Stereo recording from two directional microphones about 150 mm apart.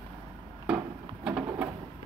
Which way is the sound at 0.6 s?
10° right (ahead or behind).